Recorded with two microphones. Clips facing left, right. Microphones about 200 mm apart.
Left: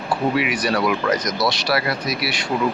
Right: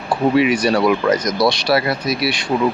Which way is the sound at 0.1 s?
25° right (ahead or behind).